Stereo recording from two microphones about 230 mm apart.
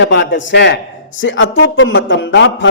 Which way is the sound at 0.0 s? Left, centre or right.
Left.